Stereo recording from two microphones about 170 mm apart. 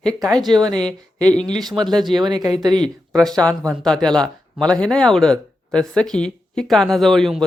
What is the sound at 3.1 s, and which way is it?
Speech, centre (ahead or behind).